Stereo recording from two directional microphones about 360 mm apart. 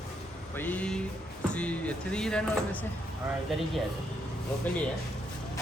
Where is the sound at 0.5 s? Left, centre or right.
Centre.